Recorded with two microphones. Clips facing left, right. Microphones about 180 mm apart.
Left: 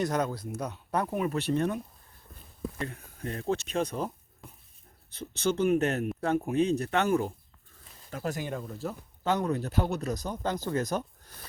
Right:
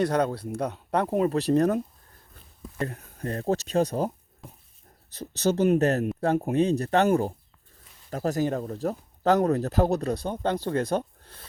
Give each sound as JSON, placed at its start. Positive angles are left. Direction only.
{"t": 0.0, "sound": "speech", "side_deg": -30}
{"t": 2.8, "sound": "speech", "side_deg": -40}
{"t": 4.4, "sound": "dog", "side_deg": 0}
{"t": 5.1, "sound": "speech", "side_deg": -40}